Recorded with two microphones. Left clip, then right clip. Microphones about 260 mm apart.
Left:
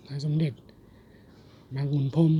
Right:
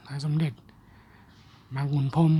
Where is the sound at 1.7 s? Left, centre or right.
Centre.